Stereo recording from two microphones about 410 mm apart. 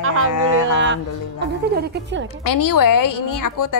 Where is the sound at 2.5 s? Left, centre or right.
Left.